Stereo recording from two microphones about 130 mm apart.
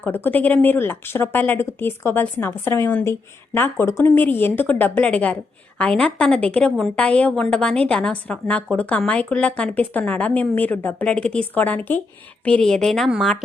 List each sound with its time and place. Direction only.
0.0 s a woman's voice: 15° left (ahead or behind)